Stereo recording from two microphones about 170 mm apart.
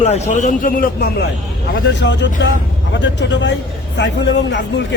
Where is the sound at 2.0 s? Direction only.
90° left.